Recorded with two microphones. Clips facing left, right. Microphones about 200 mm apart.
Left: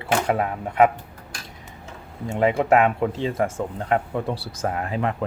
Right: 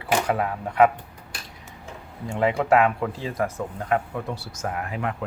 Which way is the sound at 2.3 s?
20° left (ahead or behind).